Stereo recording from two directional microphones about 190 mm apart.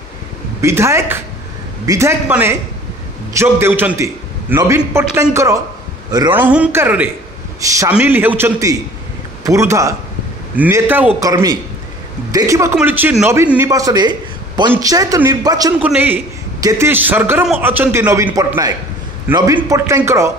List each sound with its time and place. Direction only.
0.6 s a man's voice: 15° right (ahead or behind)